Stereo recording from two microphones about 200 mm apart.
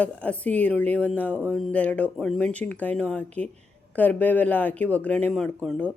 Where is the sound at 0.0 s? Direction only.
5° left (ahead or behind).